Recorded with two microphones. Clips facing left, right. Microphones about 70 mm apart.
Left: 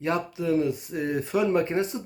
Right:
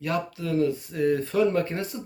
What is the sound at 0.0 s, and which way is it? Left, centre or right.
Speech, left.